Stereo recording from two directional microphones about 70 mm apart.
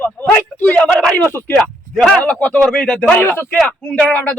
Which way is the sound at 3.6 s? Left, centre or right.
Centre.